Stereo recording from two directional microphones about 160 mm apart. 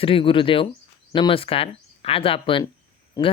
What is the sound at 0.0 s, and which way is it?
Speech, 35° left (ahead or behind).